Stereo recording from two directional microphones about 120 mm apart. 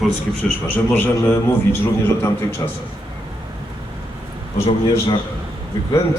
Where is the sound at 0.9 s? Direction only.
20° left (ahead or behind).